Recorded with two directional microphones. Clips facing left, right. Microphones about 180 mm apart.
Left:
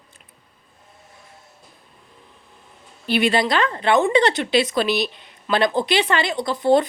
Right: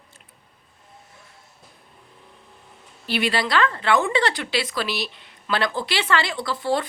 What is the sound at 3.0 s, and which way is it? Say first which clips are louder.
Speech: left 5 dB; 20° left (ahead or behind).